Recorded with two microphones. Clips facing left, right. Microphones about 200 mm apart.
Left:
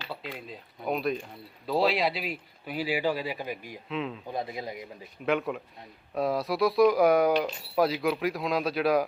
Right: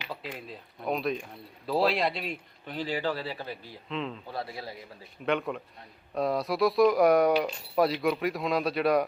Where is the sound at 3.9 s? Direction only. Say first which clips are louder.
Left 1 dB; 5° left (ahead or behind).